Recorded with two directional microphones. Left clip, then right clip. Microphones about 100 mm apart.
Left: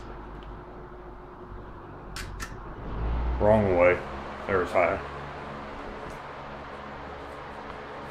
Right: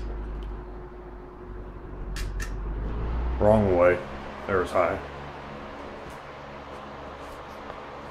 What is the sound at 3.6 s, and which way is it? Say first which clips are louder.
Speech: right 1 dB; 30° right (ahead or behind).